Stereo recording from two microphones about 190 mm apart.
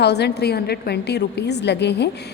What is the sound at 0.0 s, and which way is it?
A woman's voice, 60° left (ahead or behind).